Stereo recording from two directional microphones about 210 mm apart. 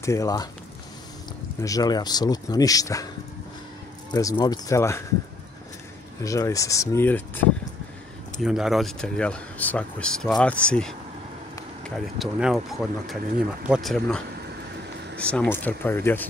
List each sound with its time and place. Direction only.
0.0 s speech: 15° left (ahead or behind)
1.6 s speech: 15° left (ahead or behind)
4.1 s speech: 15° left (ahead or behind)
6.2 s speech: 15° left (ahead or behind)
8.4 s speech: centre (ahead or behind)